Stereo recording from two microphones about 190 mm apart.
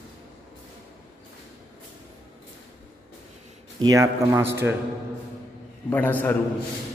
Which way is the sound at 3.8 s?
15° right (ahead or behind).